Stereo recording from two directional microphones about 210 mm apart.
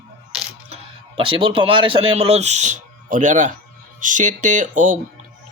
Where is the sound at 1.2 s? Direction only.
25° right (ahead or behind).